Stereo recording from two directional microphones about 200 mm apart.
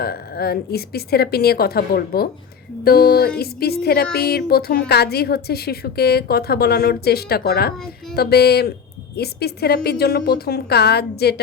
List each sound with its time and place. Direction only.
0.0 s speech: 50° left (ahead or behind)